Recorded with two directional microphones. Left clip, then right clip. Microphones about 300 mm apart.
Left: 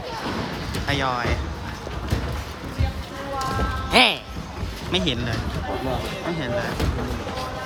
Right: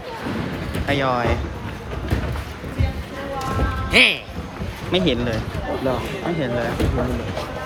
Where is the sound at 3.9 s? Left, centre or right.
Centre.